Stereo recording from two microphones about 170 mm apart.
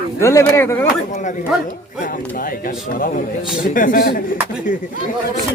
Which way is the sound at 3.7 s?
55° left (ahead or behind).